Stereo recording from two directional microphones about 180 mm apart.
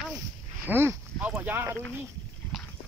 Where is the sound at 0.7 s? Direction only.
10° right (ahead or behind).